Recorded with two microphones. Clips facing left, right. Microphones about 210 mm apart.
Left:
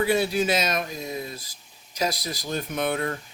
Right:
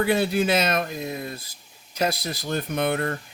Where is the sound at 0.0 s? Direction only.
55° right (ahead or behind).